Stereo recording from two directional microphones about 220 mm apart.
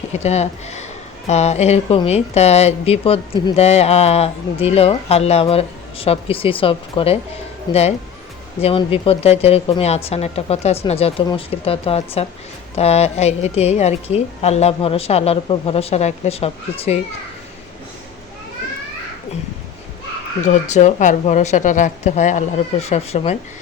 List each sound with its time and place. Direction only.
0.1 s a woman's voice: 30° left (ahead or behind)
20.4 s speech: 30° left (ahead or behind)